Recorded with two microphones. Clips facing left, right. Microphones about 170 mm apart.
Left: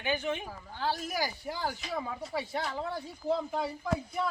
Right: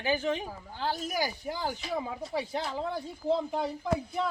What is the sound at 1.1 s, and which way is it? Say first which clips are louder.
A man's voice: right 2 dB; 15° right (ahead or behind).